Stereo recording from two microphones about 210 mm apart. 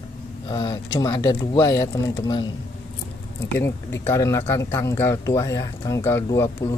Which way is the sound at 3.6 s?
10° left (ahead or behind).